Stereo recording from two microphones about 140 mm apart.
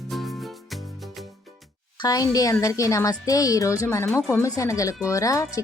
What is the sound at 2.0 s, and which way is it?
Speech, 25° left (ahead or behind).